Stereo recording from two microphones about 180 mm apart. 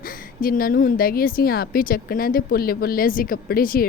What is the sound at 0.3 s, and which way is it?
Speech, 50° left (ahead or behind).